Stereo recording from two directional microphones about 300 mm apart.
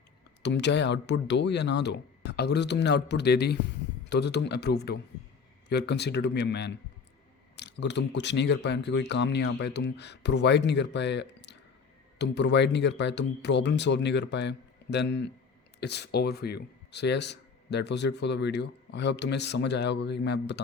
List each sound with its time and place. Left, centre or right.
0.4 s speech: left